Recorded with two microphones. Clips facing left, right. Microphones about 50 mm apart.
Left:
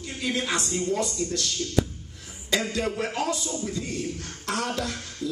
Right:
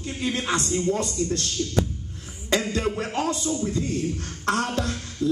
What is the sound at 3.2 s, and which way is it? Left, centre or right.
A man's voice, right.